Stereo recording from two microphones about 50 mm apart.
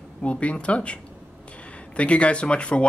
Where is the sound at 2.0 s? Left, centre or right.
Left.